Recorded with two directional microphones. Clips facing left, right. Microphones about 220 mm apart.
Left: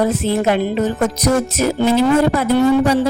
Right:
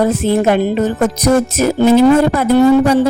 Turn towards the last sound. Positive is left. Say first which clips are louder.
# right 4 dB
turn(degrees=-50)  # may be behind; listen again after turning